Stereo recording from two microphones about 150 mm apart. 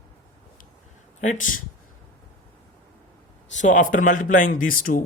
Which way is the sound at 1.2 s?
60° left (ahead or behind).